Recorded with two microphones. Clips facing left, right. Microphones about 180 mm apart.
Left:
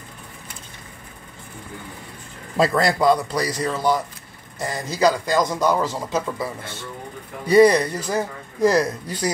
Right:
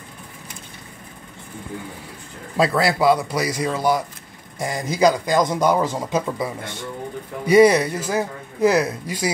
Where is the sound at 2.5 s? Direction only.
Centre (ahead or behind).